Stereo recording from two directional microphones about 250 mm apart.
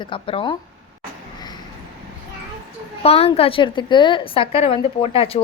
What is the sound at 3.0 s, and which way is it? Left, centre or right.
A woman's voice, left.